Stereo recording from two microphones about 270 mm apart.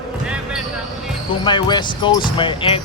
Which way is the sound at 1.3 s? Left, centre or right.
Centre.